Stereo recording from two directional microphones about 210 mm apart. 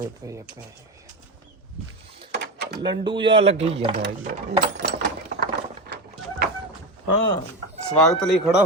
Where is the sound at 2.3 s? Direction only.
50° right (ahead or behind).